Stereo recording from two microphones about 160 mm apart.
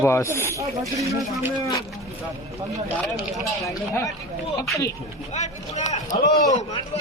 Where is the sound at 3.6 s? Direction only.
20° left (ahead or behind).